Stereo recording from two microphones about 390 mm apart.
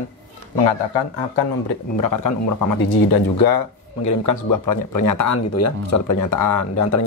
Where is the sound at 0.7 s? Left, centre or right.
Left.